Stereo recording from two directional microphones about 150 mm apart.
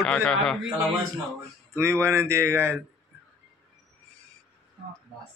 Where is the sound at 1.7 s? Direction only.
15° right (ahead or behind).